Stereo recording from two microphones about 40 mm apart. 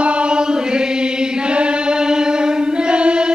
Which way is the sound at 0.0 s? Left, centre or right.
Right.